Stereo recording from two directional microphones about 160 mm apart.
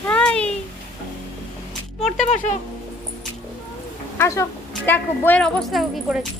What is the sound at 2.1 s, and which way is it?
Speech, 45° left (ahead or behind).